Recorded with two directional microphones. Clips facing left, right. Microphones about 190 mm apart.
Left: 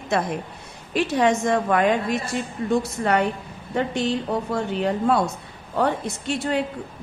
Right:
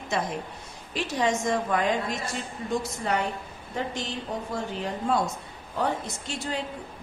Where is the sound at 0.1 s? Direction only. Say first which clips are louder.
Left 5 dB; 60° left (ahead or behind).